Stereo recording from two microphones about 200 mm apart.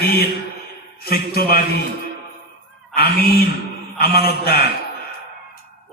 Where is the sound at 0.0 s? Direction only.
50° left (ahead or behind).